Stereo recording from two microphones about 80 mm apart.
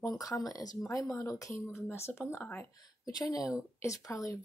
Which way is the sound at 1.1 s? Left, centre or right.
Left.